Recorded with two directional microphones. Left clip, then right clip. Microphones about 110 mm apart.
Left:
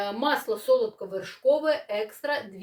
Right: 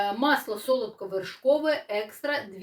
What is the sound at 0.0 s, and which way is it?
Speech, 30° left (ahead or behind).